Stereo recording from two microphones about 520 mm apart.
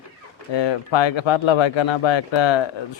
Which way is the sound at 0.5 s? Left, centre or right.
Left.